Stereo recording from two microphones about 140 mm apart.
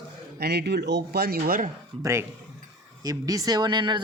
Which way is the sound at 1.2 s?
90° right.